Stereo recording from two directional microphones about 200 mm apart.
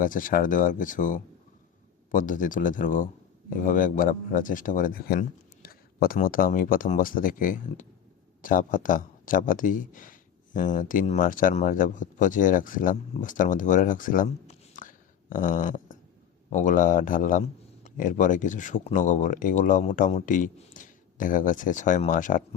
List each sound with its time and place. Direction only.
0.0 s a man's voice: 40° left (ahead or behind)